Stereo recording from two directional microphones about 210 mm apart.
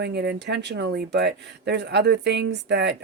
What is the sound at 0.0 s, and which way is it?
Speech, 50° right (ahead or behind).